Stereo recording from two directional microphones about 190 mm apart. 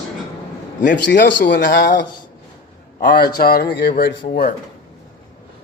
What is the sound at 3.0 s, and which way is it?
Speech, 50° left (ahead or behind).